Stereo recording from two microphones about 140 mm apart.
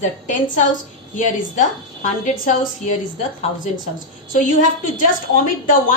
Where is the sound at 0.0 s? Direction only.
65° left (ahead or behind).